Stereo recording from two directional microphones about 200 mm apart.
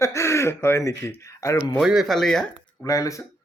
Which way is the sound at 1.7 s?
Centre (ahead or behind).